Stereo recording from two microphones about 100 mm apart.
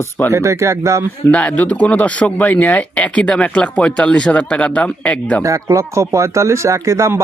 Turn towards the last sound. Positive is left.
turn(degrees=-30)  # may be behind; listen again after turning